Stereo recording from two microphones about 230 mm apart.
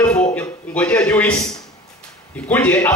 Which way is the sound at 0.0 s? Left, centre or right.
Centre.